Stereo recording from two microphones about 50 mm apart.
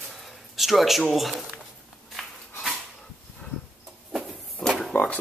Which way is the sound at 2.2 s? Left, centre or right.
Centre.